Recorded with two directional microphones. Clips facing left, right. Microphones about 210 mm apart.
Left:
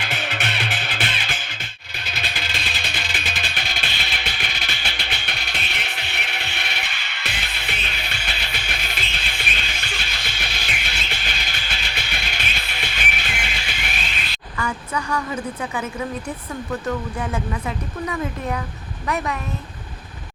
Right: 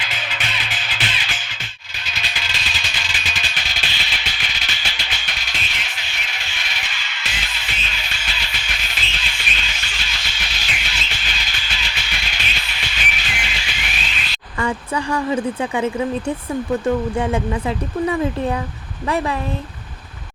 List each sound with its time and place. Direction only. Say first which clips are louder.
0.0 s music: left 3 dB; 60° left (ahead or behind)
14.6 s a woman's voice: right 5 dB; 30° right (ahead or behind)
17.2 s speech: right 6 dB; 30° right (ahead or behind)